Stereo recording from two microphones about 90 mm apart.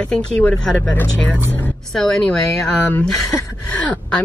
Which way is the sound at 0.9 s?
20° left (ahead or behind).